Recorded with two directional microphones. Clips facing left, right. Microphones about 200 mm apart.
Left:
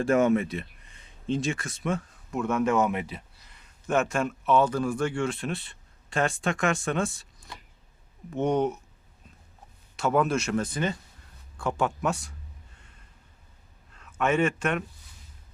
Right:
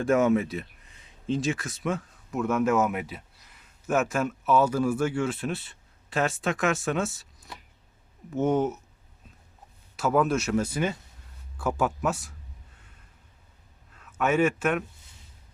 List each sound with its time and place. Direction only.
0.0 s speech: centre (ahead or behind)
10.0 s speech: centre (ahead or behind)
13.9 s speech: 5° right (ahead or behind)